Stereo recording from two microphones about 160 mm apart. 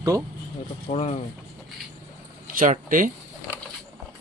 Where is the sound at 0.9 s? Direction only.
40° left (ahead or behind).